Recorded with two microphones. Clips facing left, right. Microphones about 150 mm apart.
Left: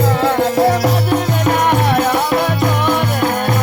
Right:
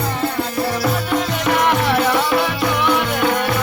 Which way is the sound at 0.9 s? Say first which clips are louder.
Left 3 dB; 60° left (ahead or behind).